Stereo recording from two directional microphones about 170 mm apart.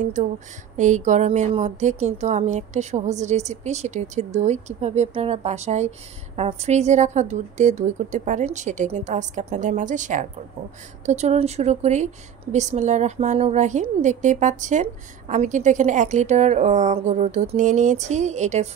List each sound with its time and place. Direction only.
0.0 s a woman's voice: 45° right (ahead or behind)